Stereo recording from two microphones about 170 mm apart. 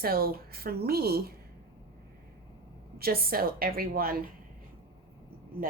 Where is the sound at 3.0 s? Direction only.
60° right (ahead or behind).